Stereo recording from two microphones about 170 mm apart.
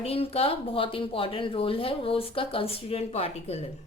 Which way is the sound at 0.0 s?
35° left (ahead or behind).